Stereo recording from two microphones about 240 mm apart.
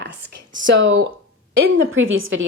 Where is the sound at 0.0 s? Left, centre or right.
Right.